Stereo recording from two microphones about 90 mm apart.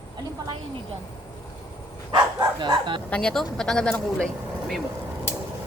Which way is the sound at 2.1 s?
50° right (ahead or behind).